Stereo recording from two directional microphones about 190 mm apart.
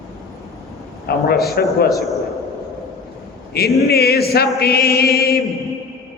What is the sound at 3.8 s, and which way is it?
Chant, 55° left (ahead or behind).